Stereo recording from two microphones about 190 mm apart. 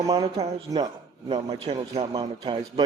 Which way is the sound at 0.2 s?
25° right (ahead or behind).